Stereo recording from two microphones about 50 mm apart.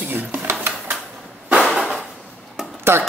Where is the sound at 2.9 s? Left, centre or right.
Right.